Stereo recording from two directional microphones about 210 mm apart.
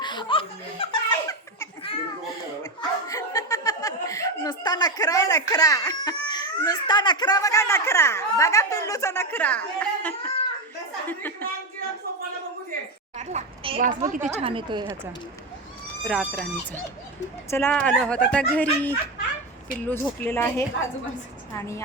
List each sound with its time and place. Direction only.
0.0 s laughter: 20° left (ahead or behind)
3.1 s speech: 15° left (ahead or behind)
13.1 s speech: 35° right (ahead or behind)
16.0 s speech: centre (ahead or behind)